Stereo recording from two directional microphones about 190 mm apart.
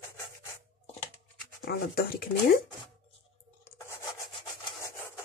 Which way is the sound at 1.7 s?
55° left (ahead or behind).